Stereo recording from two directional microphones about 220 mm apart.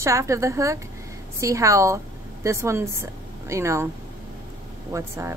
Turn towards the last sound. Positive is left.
turn(degrees=-10)  # may be behind; listen again after turning